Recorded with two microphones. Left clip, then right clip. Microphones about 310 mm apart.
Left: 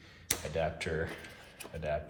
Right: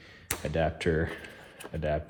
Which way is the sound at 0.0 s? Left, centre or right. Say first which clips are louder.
Right 2 dB; right.